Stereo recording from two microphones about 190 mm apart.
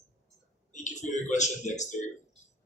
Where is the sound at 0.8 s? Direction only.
40° left (ahead or behind).